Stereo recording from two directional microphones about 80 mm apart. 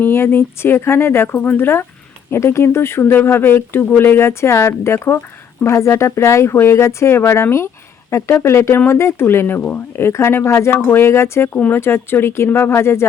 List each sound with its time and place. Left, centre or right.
0.0 s speech: left